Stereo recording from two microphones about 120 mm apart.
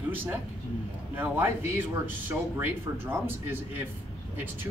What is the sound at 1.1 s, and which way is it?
Speech, 20° right (ahead or behind).